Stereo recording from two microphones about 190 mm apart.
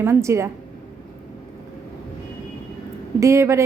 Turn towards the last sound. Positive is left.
turn(degrees=-15)  # may be behind; listen again after turning